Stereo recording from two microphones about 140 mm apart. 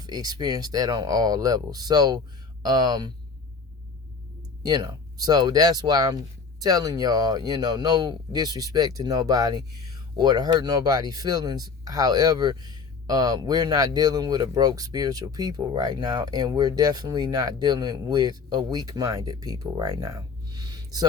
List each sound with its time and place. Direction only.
0.0 s speech: 30° right (ahead or behind)
4.6 s speech: 30° right (ahead or behind)